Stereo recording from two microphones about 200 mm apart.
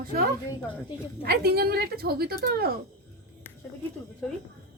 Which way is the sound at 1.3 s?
50° right (ahead or behind).